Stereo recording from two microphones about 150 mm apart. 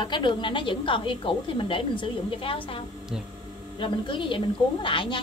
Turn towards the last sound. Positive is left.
turn(degrees=35)  # may be behind; listen again after turning